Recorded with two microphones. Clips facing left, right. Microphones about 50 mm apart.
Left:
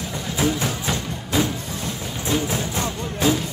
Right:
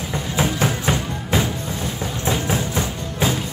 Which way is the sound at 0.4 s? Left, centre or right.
Right.